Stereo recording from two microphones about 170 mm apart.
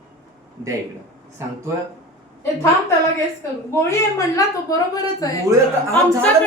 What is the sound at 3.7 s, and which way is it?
A woman's voice, 20° left (ahead or behind).